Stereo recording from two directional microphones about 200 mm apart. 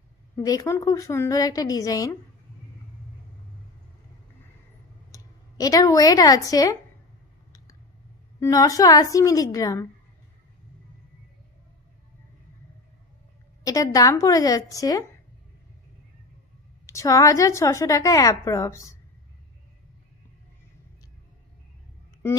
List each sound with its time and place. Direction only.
0.4 s a woman's voice: 20° left (ahead or behind)
5.1 s speech: 20° left (ahead or behind)
8.4 s a woman's voice: 15° left (ahead or behind)
13.7 s a woman's voice: 15° left (ahead or behind)
16.8 s a woman's voice: 15° left (ahead or behind)